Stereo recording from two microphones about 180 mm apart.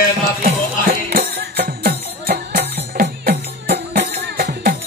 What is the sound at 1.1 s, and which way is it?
Music, 60° right (ahead or behind).